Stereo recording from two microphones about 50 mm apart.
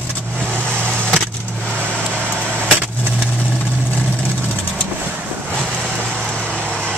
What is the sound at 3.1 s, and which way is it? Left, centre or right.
Vehicle, right.